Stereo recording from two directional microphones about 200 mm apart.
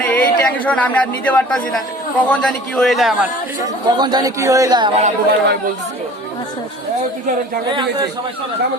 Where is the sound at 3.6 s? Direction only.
20° right (ahead or behind).